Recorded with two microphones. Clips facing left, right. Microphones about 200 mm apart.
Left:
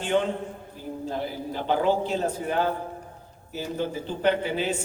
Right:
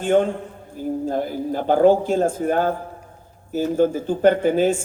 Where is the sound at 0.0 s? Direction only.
50° right (ahead or behind).